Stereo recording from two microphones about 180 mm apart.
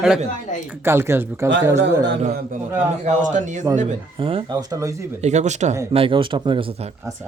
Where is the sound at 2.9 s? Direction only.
40° right (ahead or behind); by 5.0 s 20° right (ahead or behind).